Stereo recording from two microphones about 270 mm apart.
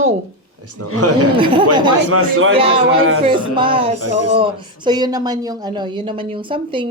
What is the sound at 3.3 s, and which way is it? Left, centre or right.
A woman's voice, centre.